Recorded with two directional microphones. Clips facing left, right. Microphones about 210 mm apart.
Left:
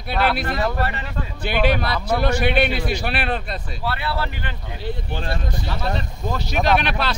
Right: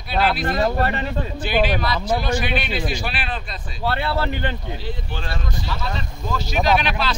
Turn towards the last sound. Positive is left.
turn(degrees=60)  # may be behind; listen again after turning